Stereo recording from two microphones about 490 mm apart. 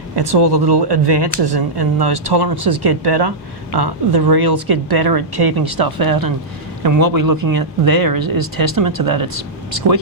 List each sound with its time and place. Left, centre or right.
0.2 s speech: right